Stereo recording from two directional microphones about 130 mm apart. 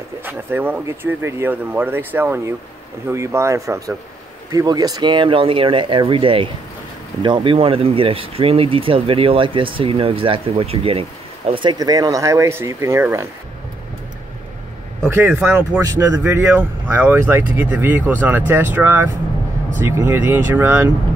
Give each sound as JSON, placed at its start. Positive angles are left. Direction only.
{"t": 0.2, "sound": "speech", "side_deg": -15}
{"t": 15.2, "sound": "speech", "side_deg": -10}
{"t": 15.8, "sound": "speech", "side_deg": -25}